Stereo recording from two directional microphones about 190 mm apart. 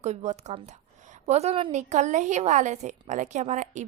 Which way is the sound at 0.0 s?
35° right (ahead or behind).